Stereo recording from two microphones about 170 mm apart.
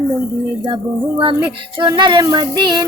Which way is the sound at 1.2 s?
30° right (ahead or behind).